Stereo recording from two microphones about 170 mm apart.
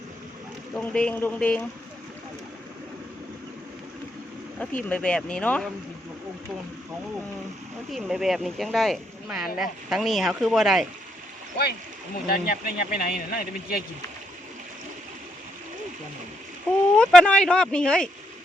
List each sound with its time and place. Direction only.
0.8 s speech: 10° left (ahead or behind)
4.6 s speech: 10° left (ahead or behind)
7.9 s speech: centre (ahead or behind)
12.3 s speech: 60° left (ahead or behind)
17.0 s speech: 5° left (ahead or behind)